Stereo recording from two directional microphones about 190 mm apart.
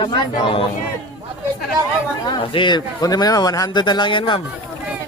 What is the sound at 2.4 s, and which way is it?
Speech, 25° left (ahead or behind).